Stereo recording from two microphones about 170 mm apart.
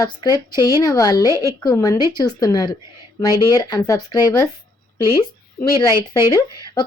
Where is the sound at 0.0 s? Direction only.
25° left (ahead or behind).